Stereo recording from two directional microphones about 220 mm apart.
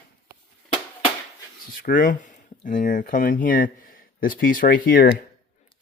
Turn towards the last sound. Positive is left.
turn(degrees=40)  # may be behind; listen again after turning